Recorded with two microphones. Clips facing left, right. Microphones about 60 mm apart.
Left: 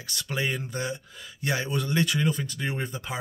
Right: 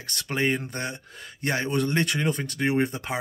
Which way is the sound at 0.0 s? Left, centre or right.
Right.